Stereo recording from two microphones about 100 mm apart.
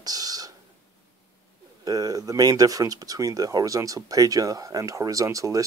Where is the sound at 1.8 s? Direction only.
40° right (ahead or behind).